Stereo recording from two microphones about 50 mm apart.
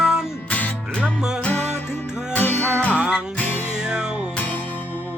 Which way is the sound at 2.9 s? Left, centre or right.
Right.